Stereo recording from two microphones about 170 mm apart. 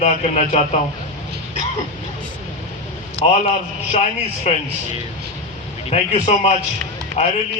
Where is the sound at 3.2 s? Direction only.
35° left (ahead or behind).